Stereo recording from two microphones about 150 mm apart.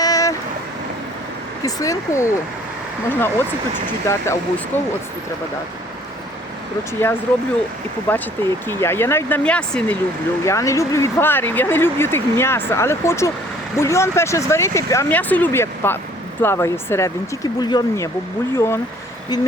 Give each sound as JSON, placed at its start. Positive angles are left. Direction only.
{"t": 0.0, "sound": "vehicle", "side_deg": 25}
{"t": 1.6, "sound": "speech", "side_deg": 20}
{"t": 8.1, "sound": "speech", "side_deg": 10}
{"t": 10.4, "sound": "speech", "side_deg": 20}